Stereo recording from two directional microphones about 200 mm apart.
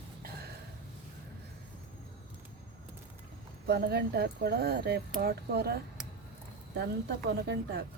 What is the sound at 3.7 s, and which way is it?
Speech, 55° right (ahead or behind).